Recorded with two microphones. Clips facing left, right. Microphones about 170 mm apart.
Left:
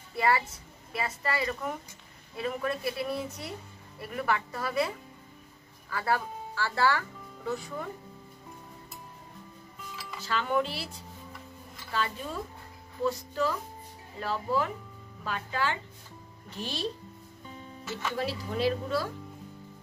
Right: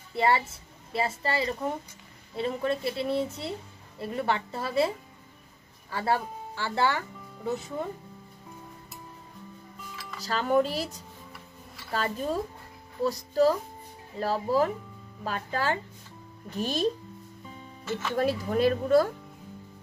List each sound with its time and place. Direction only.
0.1 s a woman's voice: 25° right (ahead or behind)
10.2 s speech: 40° right (ahead or behind)
11.3 s music: 5° right (ahead or behind)
11.9 s speech: 40° right (ahead or behind)
17.8 s speech: centre (ahead or behind)
18.1 s speech: 50° right (ahead or behind)